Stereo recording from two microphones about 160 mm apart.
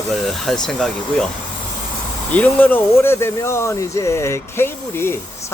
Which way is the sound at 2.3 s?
10° left (ahead or behind).